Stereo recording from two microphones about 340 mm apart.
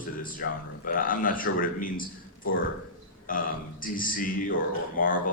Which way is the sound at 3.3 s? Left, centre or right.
Left.